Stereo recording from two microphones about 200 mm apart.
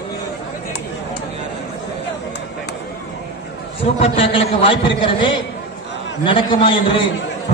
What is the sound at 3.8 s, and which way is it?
A man's voice, 30° left (ahead or behind).